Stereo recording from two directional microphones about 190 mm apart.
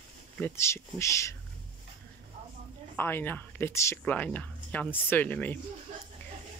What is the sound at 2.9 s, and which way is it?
Speech, 10° left (ahead or behind).